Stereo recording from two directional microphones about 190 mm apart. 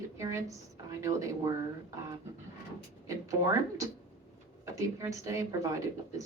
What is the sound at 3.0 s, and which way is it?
A woman's voice, 15° right (ahead or behind).